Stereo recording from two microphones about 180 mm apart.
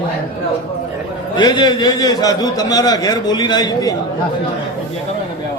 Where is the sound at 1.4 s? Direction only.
25° left (ahead or behind).